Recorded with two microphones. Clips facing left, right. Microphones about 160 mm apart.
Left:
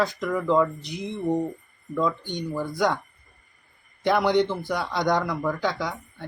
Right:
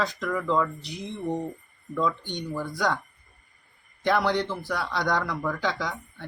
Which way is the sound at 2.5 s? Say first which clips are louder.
Left 3 dB; 15° left (ahead or behind).